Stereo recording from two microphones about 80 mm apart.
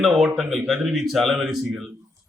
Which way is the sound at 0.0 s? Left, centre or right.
Centre.